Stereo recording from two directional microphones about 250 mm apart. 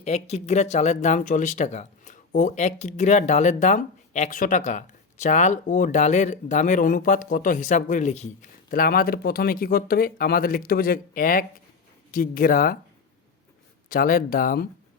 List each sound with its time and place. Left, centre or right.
0.0 s speech: left
13.9 s speech: left